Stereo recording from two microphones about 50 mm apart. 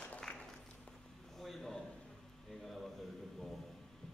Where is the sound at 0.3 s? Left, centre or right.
Left.